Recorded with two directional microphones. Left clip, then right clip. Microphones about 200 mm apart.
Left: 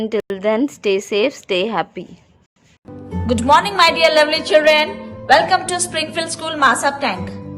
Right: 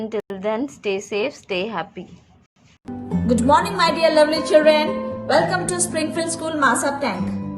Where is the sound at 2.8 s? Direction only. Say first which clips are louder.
Left 1 dB; centre (ahead or behind).